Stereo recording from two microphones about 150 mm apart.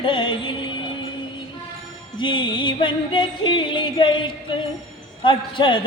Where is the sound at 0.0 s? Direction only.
35° left (ahead or behind).